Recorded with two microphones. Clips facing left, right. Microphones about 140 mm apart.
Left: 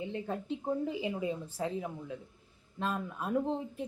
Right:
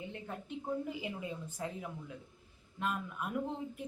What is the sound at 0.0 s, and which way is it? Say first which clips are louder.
Speech: left 7 dB; 25° left (ahead or behind).